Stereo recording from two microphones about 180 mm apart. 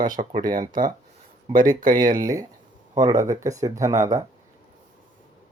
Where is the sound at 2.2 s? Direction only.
20° right (ahead or behind).